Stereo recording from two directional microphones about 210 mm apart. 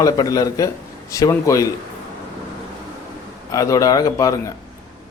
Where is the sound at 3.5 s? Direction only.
15° left (ahead or behind).